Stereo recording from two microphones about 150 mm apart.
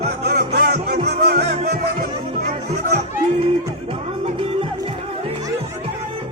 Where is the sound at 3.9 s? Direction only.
35° right (ahead or behind).